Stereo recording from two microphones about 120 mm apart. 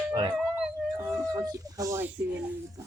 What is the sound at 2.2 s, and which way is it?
Speech, 15° right (ahead or behind).